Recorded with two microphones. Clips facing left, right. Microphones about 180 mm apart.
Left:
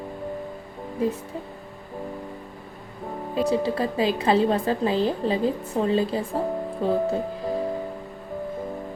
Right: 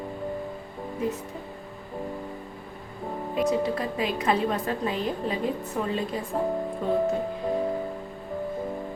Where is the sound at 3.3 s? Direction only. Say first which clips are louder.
Left 2 dB; 30° left (ahead or behind).